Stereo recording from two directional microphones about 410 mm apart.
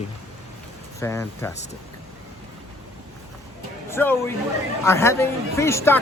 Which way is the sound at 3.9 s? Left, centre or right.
Centre.